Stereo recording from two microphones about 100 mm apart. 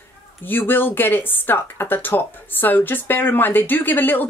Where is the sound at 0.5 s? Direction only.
20° left (ahead or behind).